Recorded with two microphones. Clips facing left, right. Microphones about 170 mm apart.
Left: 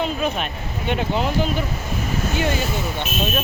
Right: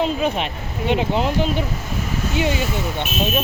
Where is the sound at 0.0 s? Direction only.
25° right (ahead or behind).